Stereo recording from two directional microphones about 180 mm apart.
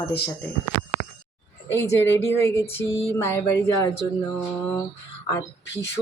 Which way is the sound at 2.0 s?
15° left (ahead or behind).